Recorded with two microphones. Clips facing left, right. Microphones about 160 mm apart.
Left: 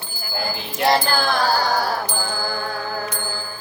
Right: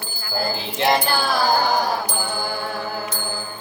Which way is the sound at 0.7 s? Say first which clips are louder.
Left 1 dB; 20° right (ahead or behind).